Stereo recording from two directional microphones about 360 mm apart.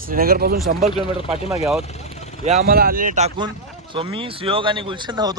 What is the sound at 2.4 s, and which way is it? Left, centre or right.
Speech, right.